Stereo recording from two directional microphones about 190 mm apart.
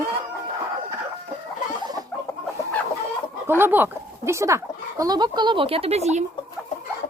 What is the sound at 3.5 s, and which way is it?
Speech, 10° right (ahead or behind).